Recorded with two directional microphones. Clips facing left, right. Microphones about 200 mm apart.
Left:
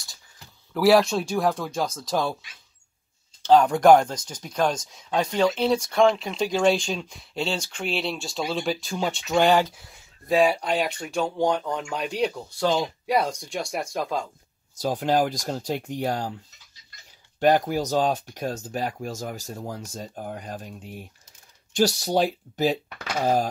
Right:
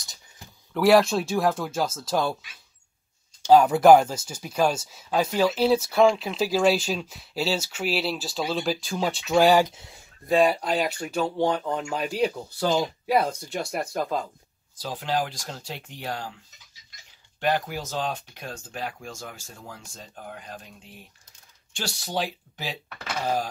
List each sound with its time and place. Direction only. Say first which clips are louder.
0.7 s speech: even; centre (ahead or behind)
3.4 s speech: right 1 dB; 5° right (ahead or behind)
9.7 s speech: right 1 dB; 25° right (ahead or behind)
10.2 s speech: even; centre (ahead or behind)
14.8 s speech: left 6 dB; 45° left (ahead or behind)
17.4 s speech: left 6 dB; 45° left (ahead or behind)